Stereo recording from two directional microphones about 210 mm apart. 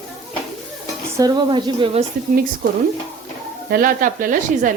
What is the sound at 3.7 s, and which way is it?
Speech, 40° right (ahead or behind).